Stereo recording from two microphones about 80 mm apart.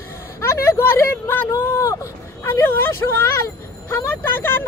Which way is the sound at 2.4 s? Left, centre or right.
Left.